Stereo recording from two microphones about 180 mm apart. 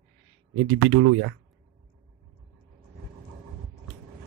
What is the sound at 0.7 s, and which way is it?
Speech, 90° right.